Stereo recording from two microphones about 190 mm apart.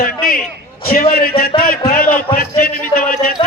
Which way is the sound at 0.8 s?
50° left (ahead or behind).